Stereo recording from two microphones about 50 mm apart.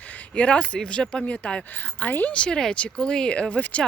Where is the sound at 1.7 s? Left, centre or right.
Left.